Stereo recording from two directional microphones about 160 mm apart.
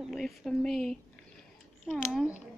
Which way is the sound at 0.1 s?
Centre (ahead or behind).